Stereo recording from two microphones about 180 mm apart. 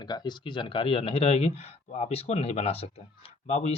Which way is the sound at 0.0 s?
25° left (ahead or behind).